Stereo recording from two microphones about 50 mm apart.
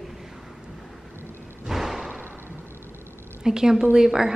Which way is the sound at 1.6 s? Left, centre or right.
Centre.